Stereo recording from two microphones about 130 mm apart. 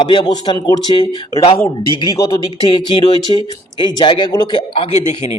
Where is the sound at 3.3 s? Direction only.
40° left (ahead or behind).